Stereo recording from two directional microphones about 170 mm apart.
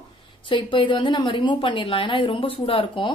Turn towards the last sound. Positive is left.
turn(degrees=30)  # may be behind; listen again after turning